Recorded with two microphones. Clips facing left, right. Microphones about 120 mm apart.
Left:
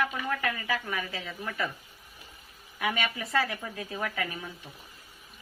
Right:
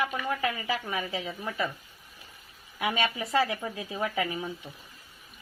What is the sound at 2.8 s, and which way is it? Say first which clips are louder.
Speech: right 2 dB; 20° right (ahead or behind).